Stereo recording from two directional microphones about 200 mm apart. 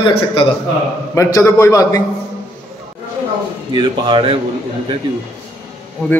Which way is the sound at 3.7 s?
25° right (ahead or behind).